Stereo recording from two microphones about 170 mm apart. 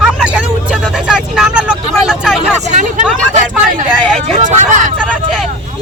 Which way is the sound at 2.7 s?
50° right (ahead or behind).